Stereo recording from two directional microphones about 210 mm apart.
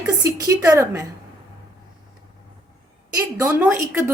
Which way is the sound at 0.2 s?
15° right (ahead or behind).